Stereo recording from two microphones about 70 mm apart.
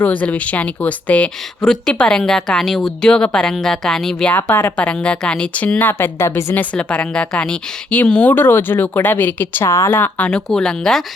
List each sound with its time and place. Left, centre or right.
0.0 s speech: left
1.6 s a woman's voice: centre
4.4 s a woman's voice: left
4.8 s a woman's voice: centre
5.9 s a woman's voice: left
6.7 s a woman's voice: centre
8.3 s speech: left
9.6 s speech: left
9.9 s speech: left
10.2 s a woman's voice: centre